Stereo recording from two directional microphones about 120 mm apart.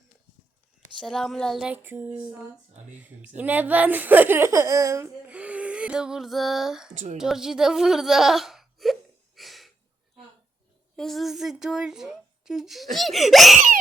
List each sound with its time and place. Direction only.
0.9 s speech: 5° left (ahead or behind)
1.6 s a child's voice: 15° right (ahead or behind)
5.3 s a sound: 10° right (ahead or behind)
6.9 s a woman's voice: 75° right (ahead or behind)
7.2 s a sound: 5° right (ahead or behind)
10.9 s speech: 5° left (ahead or behind)